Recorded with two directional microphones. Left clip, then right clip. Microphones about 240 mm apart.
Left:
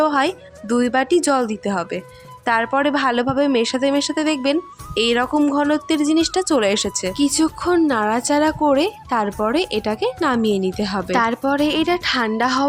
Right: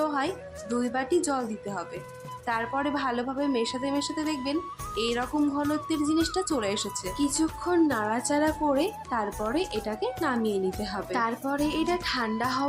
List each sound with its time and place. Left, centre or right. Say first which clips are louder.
0.0 s music: left 11 dB; left
0.8 s speech: left 10 dB; left